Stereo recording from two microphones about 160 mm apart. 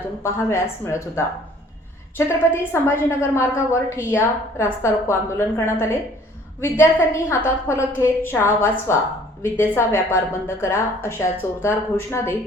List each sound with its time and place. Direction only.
0.2 s a woman's voice: 15° left (ahead or behind)